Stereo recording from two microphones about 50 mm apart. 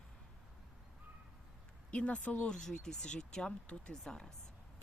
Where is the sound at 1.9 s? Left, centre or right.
Left.